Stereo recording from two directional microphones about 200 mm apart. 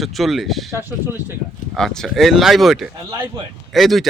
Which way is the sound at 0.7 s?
10° right (ahead or behind).